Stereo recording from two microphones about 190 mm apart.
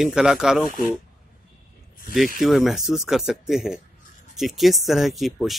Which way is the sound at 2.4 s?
Centre (ahead or behind).